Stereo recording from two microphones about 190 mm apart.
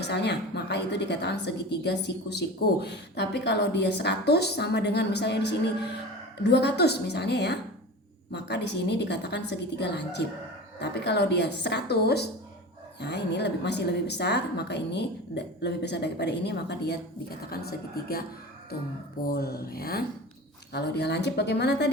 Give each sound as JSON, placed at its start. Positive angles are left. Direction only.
{"t": 0.0, "sound": "a woman's voice", "side_deg": 60}
{"t": 19.3, "sound": "a woman's voice", "side_deg": 55}